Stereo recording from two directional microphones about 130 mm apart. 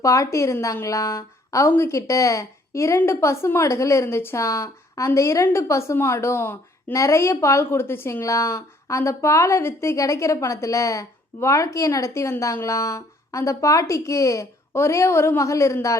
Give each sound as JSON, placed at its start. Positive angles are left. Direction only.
{"t": 0.0, "sound": "a woman's voice", "side_deg": 25}